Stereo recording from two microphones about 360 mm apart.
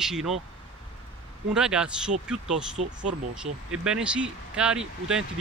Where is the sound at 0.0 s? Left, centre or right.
Centre.